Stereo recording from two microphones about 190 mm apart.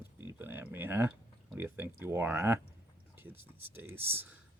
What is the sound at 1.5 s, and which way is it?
Speech, 10° right (ahead or behind).